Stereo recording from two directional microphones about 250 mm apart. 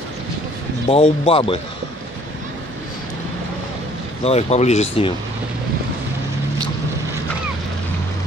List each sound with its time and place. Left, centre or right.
0.8 s speech: left
4.2 s speech: left